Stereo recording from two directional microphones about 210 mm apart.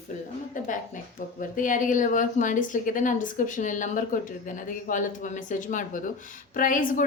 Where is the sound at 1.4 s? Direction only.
40° left (ahead or behind).